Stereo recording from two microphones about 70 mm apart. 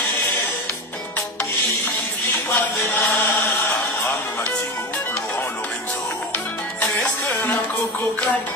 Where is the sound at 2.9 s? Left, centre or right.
Left.